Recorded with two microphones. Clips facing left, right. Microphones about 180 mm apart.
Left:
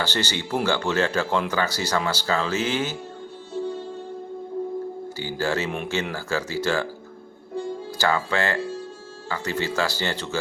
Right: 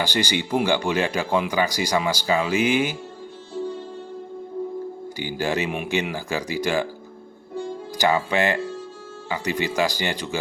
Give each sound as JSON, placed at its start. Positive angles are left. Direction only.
{"t": 0.0, "sound": "speech", "side_deg": -15}
{"t": 5.1, "sound": "speech", "side_deg": -15}
{"t": 7.9, "sound": "speech", "side_deg": -15}